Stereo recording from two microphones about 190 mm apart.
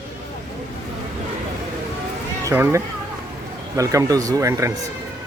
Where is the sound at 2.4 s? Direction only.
15° right (ahead or behind).